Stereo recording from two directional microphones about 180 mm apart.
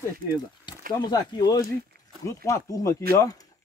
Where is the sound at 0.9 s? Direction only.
20° left (ahead or behind).